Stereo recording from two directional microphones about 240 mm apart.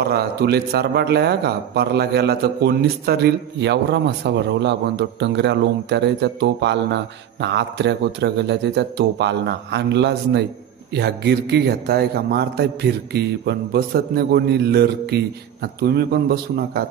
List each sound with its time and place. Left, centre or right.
0.0 s a man's voice: right